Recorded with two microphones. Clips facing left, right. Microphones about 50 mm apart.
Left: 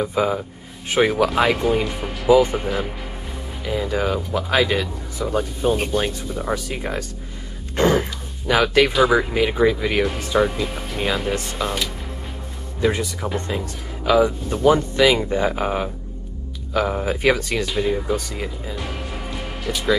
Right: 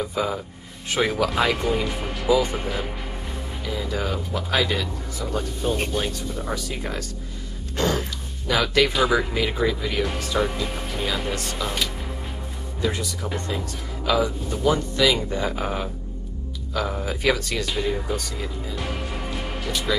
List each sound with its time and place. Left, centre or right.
0.0 s speech: left
1.3 s speech: centre
2.2 s speech: centre
2.5 s speech: centre
3.6 s speech: centre
10.1 s speech: centre
10.4 s speech: centre
12.8 s speech: left
17.6 s speech: centre
18.1 s speech: left
18.8 s music: centre